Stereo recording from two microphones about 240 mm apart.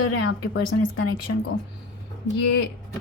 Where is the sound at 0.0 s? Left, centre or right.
Left.